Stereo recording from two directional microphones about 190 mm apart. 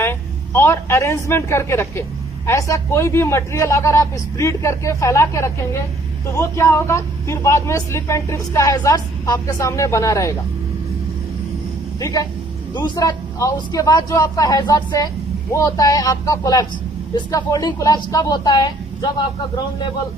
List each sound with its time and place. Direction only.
0.0 s a woman's voice: 15° left (ahead or behind)
11.9 s speech: 20° left (ahead or behind)